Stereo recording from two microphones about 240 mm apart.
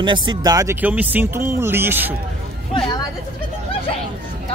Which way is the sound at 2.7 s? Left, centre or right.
Left.